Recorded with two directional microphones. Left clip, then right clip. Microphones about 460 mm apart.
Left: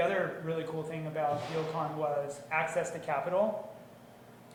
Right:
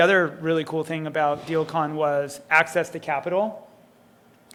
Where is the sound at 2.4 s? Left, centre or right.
Right.